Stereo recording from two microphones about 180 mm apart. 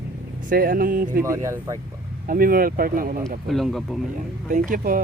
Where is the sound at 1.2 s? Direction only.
15° right (ahead or behind).